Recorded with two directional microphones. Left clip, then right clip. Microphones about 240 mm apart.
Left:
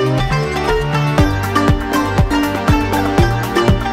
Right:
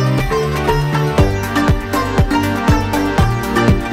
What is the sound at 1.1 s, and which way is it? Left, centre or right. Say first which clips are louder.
Music: left 2 dB; centre.